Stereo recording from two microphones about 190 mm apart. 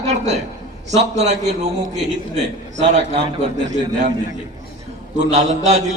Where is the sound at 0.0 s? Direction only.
35° right (ahead or behind).